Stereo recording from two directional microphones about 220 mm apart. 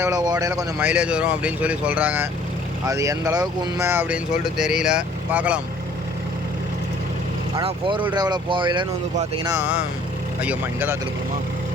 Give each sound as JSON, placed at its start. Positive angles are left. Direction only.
{"t": 0.0, "sound": "speech", "side_deg": -15}
{"t": 7.5, "sound": "speech", "side_deg": -20}
{"t": 10.4, "sound": "speech", "side_deg": -5}